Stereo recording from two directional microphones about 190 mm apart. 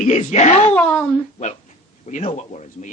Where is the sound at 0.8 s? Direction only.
5° left (ahead or behind).